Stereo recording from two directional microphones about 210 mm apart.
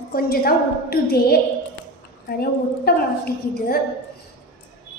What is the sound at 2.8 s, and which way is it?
A woman's voice, 45° left (ahead or behind).